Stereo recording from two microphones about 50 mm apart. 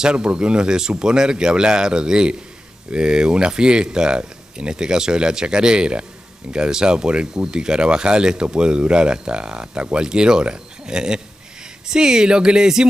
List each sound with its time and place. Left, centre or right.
0.0 s speech: centre